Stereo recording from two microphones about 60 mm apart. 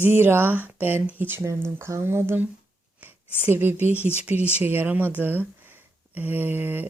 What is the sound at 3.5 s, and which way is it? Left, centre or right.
Speech, right.